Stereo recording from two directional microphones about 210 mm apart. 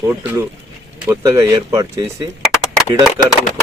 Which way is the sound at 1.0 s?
15° right (ahead or behind).